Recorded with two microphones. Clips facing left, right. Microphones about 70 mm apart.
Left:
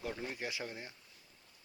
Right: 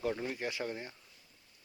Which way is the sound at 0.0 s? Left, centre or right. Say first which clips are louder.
Right 6 dB; centre.